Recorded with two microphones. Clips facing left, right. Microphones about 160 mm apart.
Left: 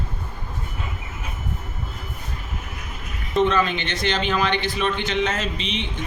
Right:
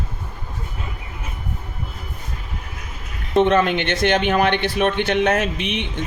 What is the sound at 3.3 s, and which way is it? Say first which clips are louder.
Speech: right 4 dB; 60° right (ahead or behind).